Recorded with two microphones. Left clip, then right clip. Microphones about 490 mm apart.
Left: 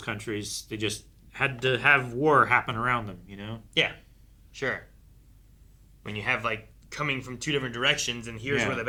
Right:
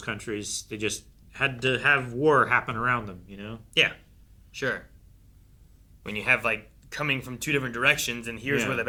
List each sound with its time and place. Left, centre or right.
0.0 s speech: left
4.5 s speech: left
6.0 s speech: left